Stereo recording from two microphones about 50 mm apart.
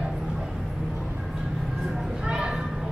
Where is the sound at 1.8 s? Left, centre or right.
Centre.